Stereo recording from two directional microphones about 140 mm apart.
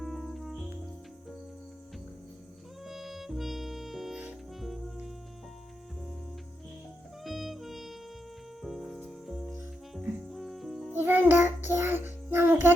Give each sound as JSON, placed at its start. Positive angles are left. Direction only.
{"t": 0.0, "sound": "cricket", "side_deg": 0}
{"t": 2.8, "sound": "music", "side_deg": 0}
{"t": 7.3, "sound": "music", "side_deg": 0}
{"t": 10.9, "sound": "music", "side_deg": -15}